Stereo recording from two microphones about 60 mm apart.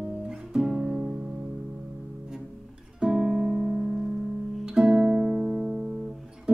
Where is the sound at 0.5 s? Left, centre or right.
Centre.